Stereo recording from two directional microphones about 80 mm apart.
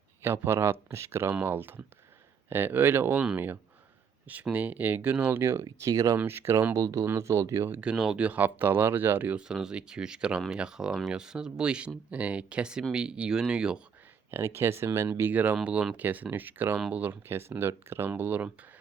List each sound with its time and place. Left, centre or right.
0.2 s speech: right
5.3 s speech: right
5.6 s speech: right
6.1 s speech: right
6.7 s speech: right
7.8 s speech: centre
8.2 s speech: right
9.4 s speech: centre
14.3 s speech: right
15.3 s speech: right